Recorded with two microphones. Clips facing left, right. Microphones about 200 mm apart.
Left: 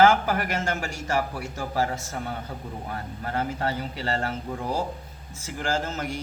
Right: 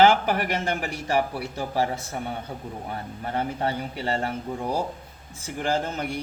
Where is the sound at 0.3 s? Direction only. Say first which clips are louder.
Right 2 dB; 30° right (ahead or behind).